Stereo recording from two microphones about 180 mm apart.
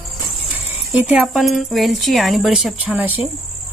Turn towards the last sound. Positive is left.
turn(degrees=-5)  # may be behind; listen again after turning